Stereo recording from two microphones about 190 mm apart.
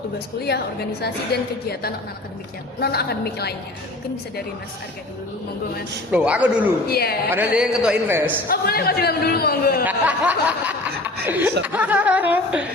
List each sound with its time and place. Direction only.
1.0 s a woman's voice: 55° left (ahead or behind)
6.1 s speech: 5° right (ahead or behind)
6.8 s a woman's voice: 55° left (ahead or behind)
7.3 s speech: 10° right (ahead or behind)
8.4 s a man's voice: 55° left (ahead or behind)
9.8 s speech: 10° right (ahead or behind)